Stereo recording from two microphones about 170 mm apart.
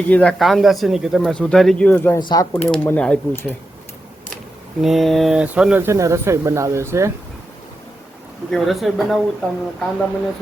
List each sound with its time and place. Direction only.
0.1 s speech: 5° left (ahead or behind)
2.1 s speech: 25° left (ahead or behind)
2.5 s speech: 10° left (ahead or behind)
4.8 s speech: centre (ahead or behind); by 7.1 s 15° right (ahead or behind)
8.4 s speech: centre (ahead or behind)